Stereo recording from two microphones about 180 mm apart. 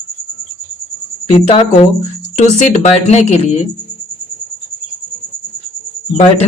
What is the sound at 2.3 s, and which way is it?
Speech, 40° left (ahead or behind).